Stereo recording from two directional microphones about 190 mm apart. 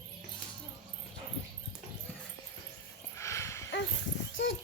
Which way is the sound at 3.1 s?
15° left (ahead or behind).